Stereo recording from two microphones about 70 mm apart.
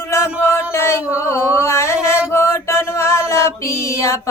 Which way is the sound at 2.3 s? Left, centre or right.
Left.